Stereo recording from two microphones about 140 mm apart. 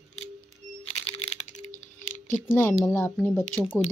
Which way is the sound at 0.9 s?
45° left (ahead or behind).